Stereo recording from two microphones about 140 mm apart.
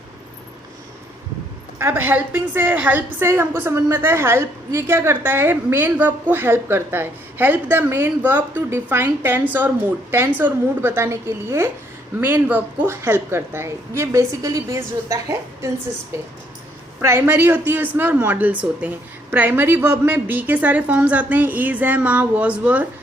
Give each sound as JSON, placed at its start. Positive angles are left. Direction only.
{"t": 1.8, "sound": "a woman's voice", "side_deg": -15}
{"t": 17.0, "sound": "a woman's voice", "side_deg": -15}